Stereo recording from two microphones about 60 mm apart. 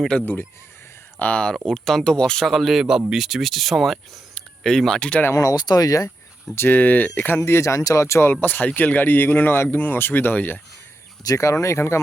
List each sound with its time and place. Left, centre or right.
1.2 s speech: centre
1.5 s speech: centre
2.5 s speech: centre
5.3 s speech: left
6.6 s speech: left
8.3 s speech: left
11.3 s speech: left